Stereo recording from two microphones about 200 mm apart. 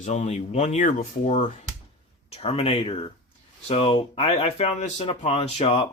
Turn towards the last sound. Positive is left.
turn(degrees=30)  # may be behind; listen again after turning